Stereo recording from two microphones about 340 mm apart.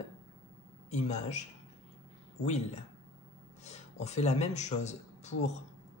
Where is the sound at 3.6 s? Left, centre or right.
Centre.